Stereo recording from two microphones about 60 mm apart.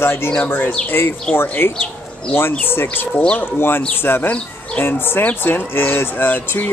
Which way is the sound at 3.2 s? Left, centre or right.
Left.